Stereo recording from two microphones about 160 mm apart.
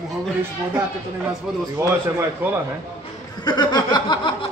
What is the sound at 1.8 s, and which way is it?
Speech, 15° right (ahead or behind).